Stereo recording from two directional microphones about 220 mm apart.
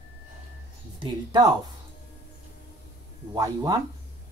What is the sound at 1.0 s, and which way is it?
Speech, 20° right (ahead or behind).